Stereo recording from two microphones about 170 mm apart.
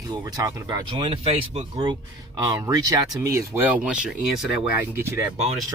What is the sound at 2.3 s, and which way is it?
Speech, 20° right (ahead or behind).